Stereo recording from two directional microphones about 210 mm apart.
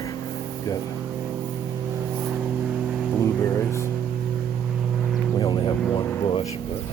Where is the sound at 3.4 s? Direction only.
10° left (ahead or behind).